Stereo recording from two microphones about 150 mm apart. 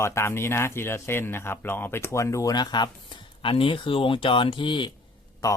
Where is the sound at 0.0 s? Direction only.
20° left (ahead or behind).